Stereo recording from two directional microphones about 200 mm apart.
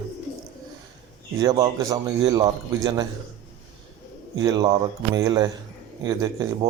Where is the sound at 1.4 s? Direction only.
15° right (ahead or behind).